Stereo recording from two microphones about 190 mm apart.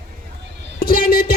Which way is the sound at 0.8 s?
50° left (ahead or behind).